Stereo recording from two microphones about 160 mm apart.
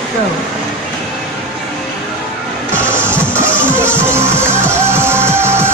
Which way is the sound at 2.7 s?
15° right (ahead or behind).